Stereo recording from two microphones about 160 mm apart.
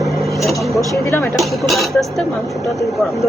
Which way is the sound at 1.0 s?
15° left (ahead or behind).